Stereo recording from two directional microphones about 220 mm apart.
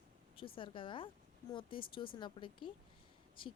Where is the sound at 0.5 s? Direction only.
20° left (ahead or behind).